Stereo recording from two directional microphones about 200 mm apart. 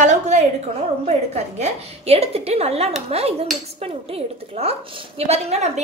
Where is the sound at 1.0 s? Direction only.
30° right (ahead or behind).